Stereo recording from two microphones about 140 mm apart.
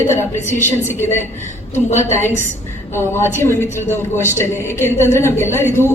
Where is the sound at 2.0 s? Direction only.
15° left (ahead or behind).